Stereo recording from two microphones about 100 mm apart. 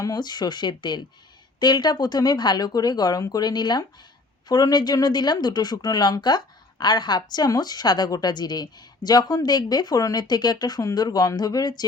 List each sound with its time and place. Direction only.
0.0 s speech: 40° left (ahead or behind)